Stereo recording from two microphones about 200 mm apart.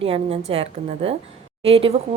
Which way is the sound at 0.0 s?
30° right (ahead or behind).